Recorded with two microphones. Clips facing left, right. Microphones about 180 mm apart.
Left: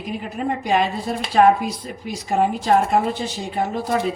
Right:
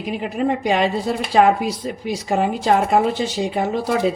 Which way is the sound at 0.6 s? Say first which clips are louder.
Right 2 dB; 90° right.